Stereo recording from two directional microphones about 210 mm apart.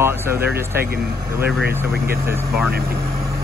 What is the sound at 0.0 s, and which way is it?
Speech, 10° right (ahead or behind).